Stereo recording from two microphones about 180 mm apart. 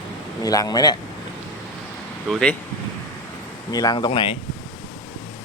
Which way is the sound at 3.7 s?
20° left (ahead or behind).